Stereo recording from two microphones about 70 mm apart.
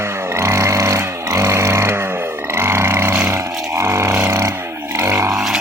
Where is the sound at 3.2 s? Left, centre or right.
Right.